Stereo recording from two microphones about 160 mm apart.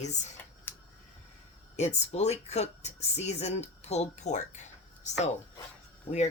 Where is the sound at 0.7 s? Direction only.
10° left (ahead or behind).